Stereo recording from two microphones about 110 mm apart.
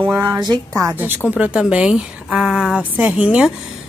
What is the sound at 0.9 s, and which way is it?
A woman's voice, 15° right (ahead or behind).